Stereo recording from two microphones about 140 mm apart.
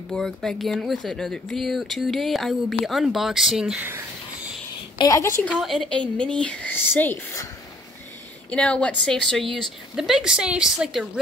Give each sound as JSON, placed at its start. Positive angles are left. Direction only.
{"t": 0.1, "sound": "speech", "side_deg": 5}
{"t": 3.8, "sound": "a sound", "side_deg": -15}
{"t": 4.9, "sound": "a woman's voice", "side_deg": 25}
{"t": 5.4, "sound": "speech", "side_deg": 5}
{"t": 8.5, "sound": "speech", "side_deg": 10}